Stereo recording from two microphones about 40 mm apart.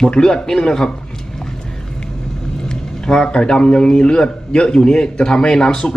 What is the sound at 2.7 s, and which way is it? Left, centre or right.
A man's voice, centre.